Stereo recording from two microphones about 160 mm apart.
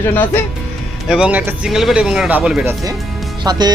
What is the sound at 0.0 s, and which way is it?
Speech, 15° left (ahead or behind).